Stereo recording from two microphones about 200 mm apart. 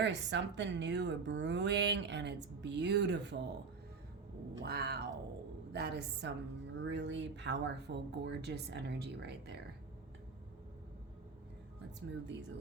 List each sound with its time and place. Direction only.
0.0 s a woman's voice: 60° right (ahead or behind)
4.6 s cat: 55° right (ahead or behind)
5.7 s a woman's voice: 55° right (ahead or behind)
11.9 s a woman's voice: 60° right (ahead or behind)